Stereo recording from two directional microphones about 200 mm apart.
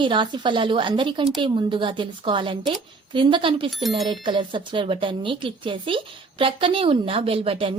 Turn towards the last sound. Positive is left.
turn(degrees=-25)  # may be behind; listen again after turning